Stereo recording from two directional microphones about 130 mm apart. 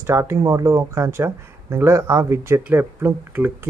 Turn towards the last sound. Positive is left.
turn(degrees=-15)  # may be behind; listen again after turning